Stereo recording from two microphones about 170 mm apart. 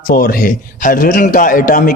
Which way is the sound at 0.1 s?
60° left (ahead or behind).